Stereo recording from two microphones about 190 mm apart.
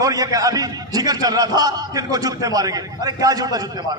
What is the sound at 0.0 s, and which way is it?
A man's voice, 20° right (ahead or behind).